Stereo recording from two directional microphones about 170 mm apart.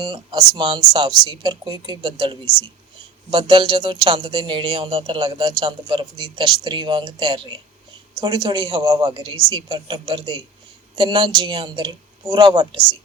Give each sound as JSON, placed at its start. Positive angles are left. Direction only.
{"t": 0.0, "sound": "speech", "side_deg": -25}